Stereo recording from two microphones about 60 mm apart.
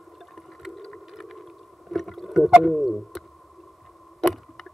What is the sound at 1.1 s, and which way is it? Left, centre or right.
Whale vocalization, centre.